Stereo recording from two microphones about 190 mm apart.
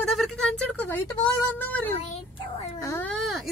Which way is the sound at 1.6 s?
10° left (ahead or behind).